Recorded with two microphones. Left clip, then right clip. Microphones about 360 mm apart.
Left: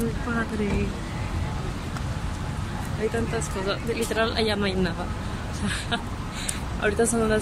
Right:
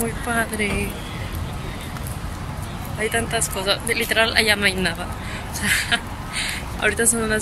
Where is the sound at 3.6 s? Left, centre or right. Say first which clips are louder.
Right 7 dB; centre.